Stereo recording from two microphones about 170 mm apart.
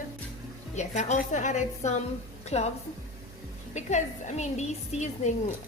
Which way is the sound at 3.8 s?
45° left (ahead or behind).